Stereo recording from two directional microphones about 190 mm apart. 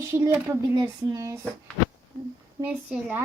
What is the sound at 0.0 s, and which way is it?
Speech, 15° right (ahead or behind).